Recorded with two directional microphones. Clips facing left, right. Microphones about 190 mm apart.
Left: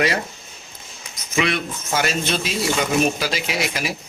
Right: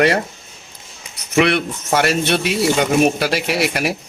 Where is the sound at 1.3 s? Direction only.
65° right (ahead or behind).